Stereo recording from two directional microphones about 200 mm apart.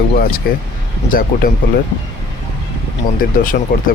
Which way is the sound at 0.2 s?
45° left (ahead or behind).